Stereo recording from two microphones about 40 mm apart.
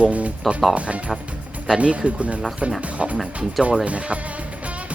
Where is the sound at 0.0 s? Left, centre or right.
Right.